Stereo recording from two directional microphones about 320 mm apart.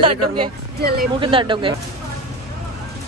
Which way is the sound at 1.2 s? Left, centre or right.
Centre.